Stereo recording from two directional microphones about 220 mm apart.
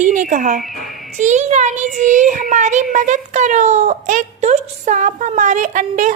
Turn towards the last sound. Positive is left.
turn(degrees=-35)  # may be behind; listen again after turning